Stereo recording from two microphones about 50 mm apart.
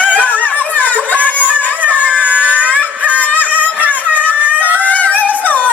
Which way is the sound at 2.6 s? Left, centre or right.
Left.